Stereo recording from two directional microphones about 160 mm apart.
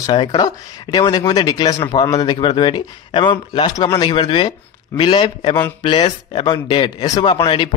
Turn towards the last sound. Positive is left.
turn(degrees=30)  # may be behind; listen again after turning